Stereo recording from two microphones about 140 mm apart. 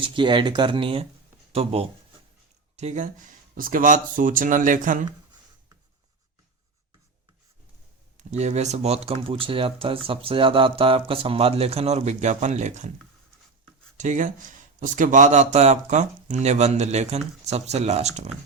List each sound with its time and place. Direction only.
0.0 s speech: 35° right (ahead or behind)
2.7 s speech: 55° right (ahead or behind)
8.3 s speech: 55° right (ahead or behind)
13.9 s speech: 60° right (ahead or behind)